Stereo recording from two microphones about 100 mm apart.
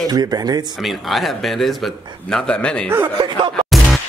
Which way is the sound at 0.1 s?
45° right (ahead or behind).